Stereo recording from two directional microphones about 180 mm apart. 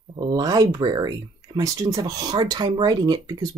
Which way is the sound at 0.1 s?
25° right (ahead or behind).